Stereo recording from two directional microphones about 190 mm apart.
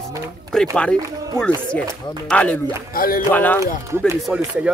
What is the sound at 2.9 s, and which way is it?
Speech, 50° left (ahead or behind).